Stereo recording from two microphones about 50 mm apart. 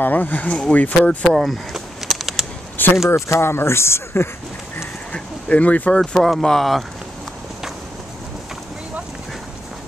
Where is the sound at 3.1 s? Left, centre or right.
Left.